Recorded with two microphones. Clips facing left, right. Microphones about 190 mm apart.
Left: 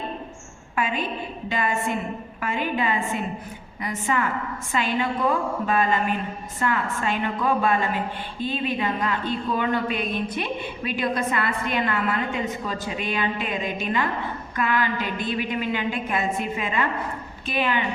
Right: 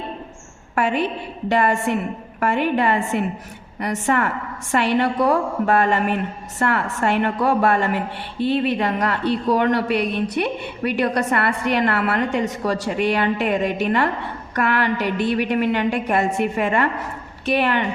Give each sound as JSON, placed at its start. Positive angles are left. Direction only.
{"t": 0.8, "sound": "a woman's voice", "side_deg": -75}